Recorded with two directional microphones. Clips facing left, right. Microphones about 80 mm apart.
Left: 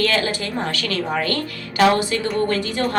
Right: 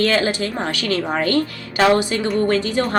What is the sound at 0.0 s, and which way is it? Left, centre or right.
A woman's voice, right.